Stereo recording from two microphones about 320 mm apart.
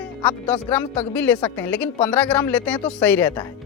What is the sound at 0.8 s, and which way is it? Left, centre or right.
Speech, centre.